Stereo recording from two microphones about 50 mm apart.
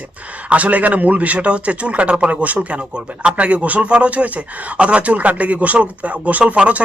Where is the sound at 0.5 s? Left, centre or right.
Right.